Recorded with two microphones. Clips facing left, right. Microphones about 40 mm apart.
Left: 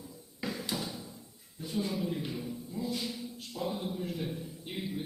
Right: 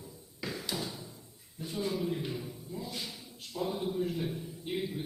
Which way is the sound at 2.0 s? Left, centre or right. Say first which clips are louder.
Even; centre.